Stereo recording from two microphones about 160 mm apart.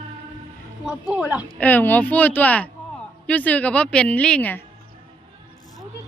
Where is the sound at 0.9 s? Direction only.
5° right (ahead or behind).